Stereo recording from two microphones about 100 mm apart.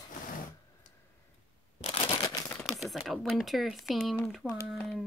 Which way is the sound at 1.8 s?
75° left (ahead or behind).